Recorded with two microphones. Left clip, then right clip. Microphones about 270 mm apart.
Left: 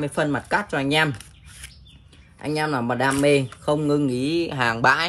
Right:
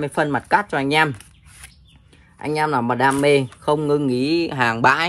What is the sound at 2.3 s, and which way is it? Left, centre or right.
Speech, centre.